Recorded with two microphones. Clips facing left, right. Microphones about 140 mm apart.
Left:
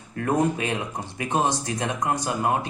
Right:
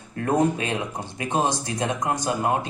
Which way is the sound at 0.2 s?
30° right (ahead or behind).